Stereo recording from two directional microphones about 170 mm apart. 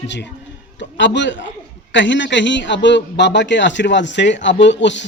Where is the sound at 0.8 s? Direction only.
90° left.